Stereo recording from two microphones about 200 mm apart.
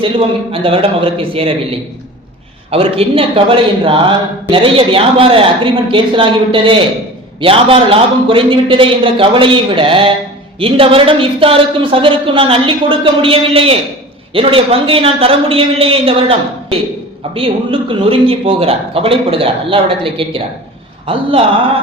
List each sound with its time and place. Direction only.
0.0 s a woman's voice: 25° right (ahead or behind)
2.6 s a woman's voice: 30° right (ahead or behind)